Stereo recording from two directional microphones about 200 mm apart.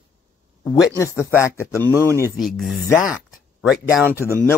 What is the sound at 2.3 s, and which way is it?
Speech, centre (ahead or behind).